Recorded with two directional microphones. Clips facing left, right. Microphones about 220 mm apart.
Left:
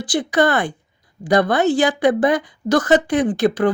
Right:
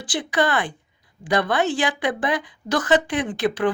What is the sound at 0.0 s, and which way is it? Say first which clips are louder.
Speech: left 5 dB; 40° left (ahead or behind).